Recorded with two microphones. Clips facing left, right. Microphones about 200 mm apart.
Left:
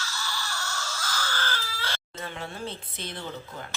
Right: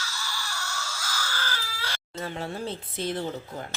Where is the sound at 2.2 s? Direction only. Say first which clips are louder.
Right 4 dB; 35° right (ahead or behind).